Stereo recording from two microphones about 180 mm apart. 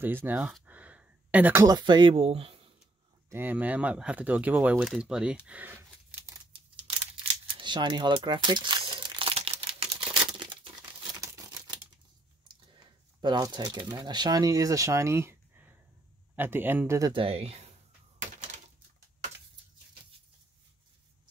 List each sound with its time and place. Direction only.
0.0 s speech: 10° right (ahead or behind); by 2.7 s 30° right (ahead or behind)
3.3 s speech: 10° right (ahead or behind)
6.5 s crumpling: 30° right (ahead or behind)
11.1 s camera: 20° right (ahead or behind)
12.7 s speech: 25° right (ahead or behind)
17.1 s speech: 30° right (ahead or behind)